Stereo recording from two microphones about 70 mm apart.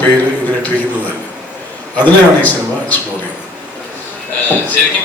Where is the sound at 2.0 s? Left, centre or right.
Left.